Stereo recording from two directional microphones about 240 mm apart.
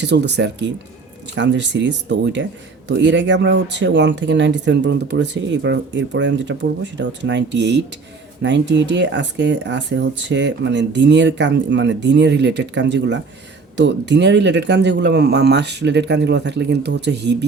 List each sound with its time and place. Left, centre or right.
0.0 s speech: right